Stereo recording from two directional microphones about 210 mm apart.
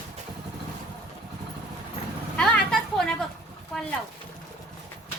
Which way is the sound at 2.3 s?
5° left (ahead or behind).